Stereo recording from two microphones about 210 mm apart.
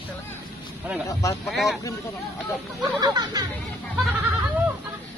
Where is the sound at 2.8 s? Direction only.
20° right (ahead or behind).